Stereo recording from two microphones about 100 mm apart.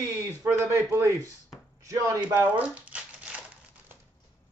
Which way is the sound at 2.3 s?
15° right (ahead or behind).